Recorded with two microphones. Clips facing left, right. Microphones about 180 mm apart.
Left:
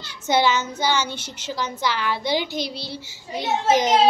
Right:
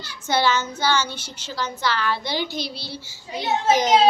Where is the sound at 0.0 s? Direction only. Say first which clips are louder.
Left 2 dB; 20° left (ahead or behind).